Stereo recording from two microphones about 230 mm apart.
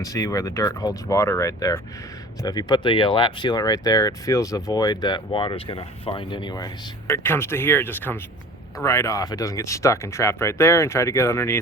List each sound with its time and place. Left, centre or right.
0.0 s speech: centre